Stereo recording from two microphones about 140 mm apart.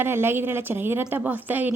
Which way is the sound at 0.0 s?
15° right (ahead or behind).